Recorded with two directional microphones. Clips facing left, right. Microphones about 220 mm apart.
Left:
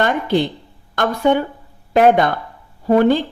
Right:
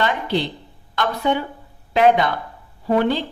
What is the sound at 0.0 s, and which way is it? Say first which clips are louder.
A woman's voice: left 4 dB; 50° left (ahead or behind).